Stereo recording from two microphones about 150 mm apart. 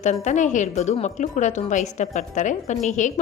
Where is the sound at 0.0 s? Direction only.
50° left (ahead or behind).